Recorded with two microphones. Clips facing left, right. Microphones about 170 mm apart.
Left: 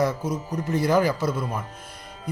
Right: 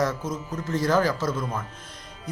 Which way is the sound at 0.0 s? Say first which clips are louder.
Left 2 dB; 10° left (ahead or behind).